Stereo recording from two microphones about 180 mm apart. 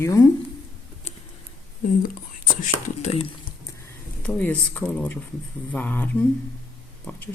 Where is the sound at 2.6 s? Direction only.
40° left (ahead or behind).